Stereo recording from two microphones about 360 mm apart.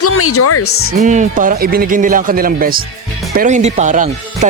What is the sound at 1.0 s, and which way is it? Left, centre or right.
Speech, right.